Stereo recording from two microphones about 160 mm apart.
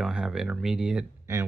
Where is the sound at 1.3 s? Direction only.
15° right (ahead or behind).